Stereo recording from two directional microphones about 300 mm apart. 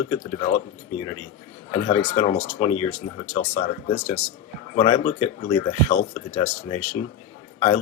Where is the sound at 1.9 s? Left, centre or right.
Centre.